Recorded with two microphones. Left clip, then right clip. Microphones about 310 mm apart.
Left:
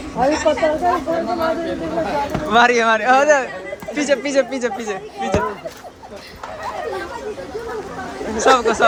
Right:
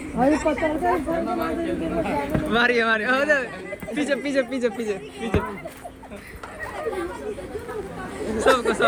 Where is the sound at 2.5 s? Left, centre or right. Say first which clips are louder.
Left 7 dB; centre.